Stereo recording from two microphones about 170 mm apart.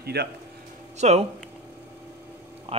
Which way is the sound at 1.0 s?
40° right (ahead or behind).